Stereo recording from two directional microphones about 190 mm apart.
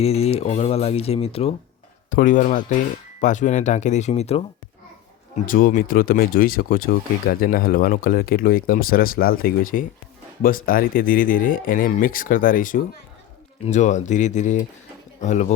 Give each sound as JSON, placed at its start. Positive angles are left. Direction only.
{"t": 0.0, "sound": "speech", "side_deg": 30}
{"t": 2.0, "sound": "speech", "side_deg": 45}
{"t": 5.5, "sound": "speech", "side_deg": 45}